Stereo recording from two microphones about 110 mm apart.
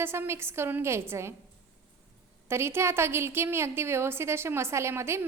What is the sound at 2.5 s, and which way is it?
A woman's voice, 25° right (ahead or behind).